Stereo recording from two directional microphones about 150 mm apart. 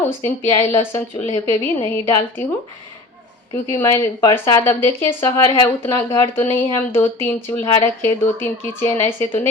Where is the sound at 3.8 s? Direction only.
20° left (ahead or behind).